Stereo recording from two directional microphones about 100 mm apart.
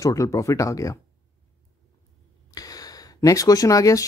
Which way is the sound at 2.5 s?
40° left (ahead or behind).